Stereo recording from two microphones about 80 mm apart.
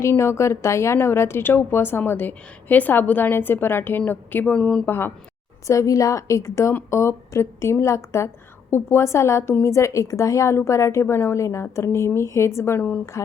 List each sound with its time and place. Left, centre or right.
0.0 s a woman's voice: left; by 4.8 s centre
4.9 s a woman's voice: left
5.6 s a woman's voice: left
13.2 s a sound: left